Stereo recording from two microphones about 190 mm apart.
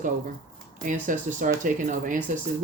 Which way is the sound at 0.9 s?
45° right (ahead or behind).